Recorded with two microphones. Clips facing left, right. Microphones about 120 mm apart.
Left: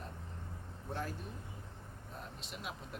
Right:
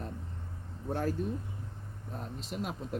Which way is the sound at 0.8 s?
45° right (ahead or behind).